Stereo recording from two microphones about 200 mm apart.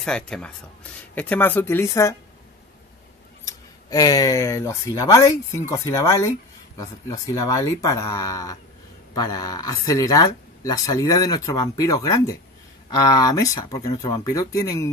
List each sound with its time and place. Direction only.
0.0 s speech: 5° left (ahead or behind)
3.4 s speech: 20° left (ahead or behind)